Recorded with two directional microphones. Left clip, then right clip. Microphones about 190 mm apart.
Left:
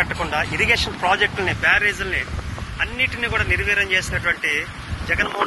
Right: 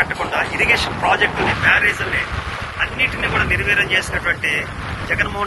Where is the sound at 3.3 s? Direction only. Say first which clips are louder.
Right 2 dB; 10° left (ahead or behind).